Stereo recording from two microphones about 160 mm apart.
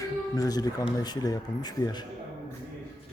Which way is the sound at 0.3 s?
25° left (ahead or behind).